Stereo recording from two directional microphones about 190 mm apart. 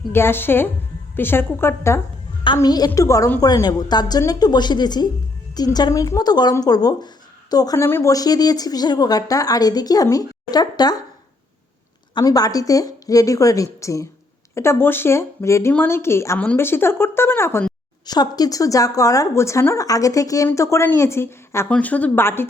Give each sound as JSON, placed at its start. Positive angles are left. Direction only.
{"t": 0.1, "sound": "speech", "side_deg": 10}
{"t": 12.1, "sound": "speech", "side_deg": 20}
{"t": 18.0, "sound": "speech", "side_deg": 20}